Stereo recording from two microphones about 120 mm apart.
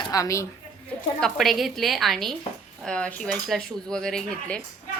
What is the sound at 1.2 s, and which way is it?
A woman's voice, 5° left (ahead or behind).